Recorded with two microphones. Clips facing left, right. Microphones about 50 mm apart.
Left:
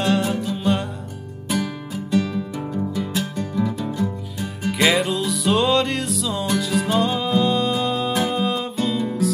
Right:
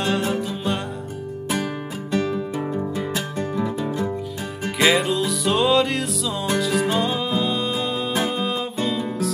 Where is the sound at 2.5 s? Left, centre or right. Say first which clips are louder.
Even; centre.